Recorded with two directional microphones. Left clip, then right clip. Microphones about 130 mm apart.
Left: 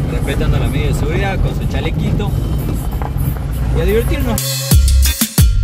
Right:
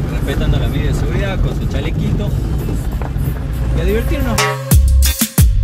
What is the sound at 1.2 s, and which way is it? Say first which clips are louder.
Speech: left 2 dB; 35° left (ahead or behind).